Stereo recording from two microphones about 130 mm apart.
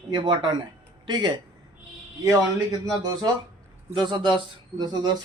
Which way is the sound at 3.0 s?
30° right (ahead or behind).